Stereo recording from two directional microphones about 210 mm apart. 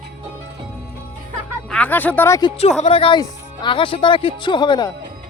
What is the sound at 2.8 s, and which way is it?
Speech, 25° left (ahead or behind).